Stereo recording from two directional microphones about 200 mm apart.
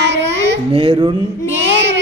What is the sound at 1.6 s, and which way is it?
Child singing, 60° right (ahead or behind).